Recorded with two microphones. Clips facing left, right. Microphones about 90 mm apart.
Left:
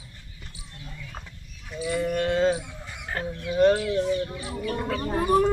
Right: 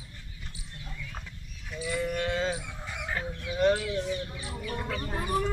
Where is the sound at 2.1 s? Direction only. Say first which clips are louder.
Left 10 dB; 40° left (ahead or behind).